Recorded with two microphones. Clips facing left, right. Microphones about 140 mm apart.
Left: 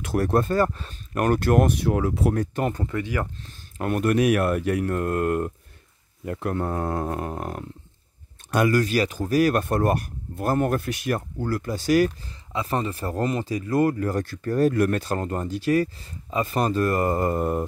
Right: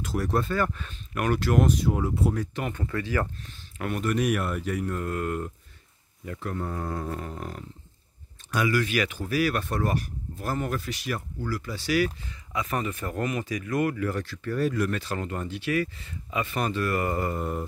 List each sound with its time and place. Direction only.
0.0 s speech: 60° left (ahead or behind); by 2.3 s 90° left
2.3 s speech: 40° left (ahead or behind)
2.9 s speech: 15° left (ahead or behind)
3.7 s speech: 45° left (ahead or behind)
12.5 s speech: 30° left (ahead or behind)